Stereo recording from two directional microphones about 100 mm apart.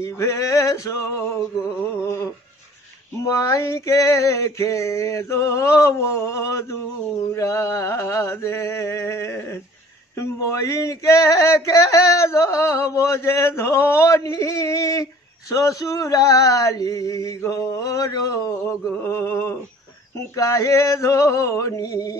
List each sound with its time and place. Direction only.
0.0 s male singing: 30° left (ahead or behind)
3.2 s male singing: 30° left (ahead or behind)
7.3 s a sound: 30° left (ahead or behind)
10.1 s male singing: 35° left (ahead or behind)
18.7 s a sound: 25° left (ahead or behind)
20.2 s male singing: 30° left (ahead or behind)